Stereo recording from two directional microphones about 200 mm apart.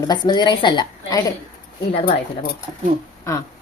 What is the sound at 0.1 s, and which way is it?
A woman's voice, 20° left (ahead or behind).